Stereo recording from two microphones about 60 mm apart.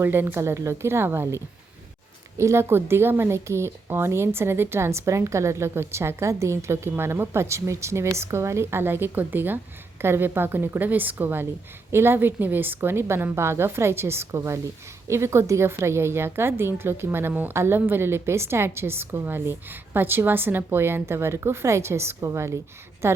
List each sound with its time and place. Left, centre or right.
0.0 s a woman's voice: right
0.3 s a woman's voice: right
2.4 s a woman's voice: right
14.3 s a woman's voice: right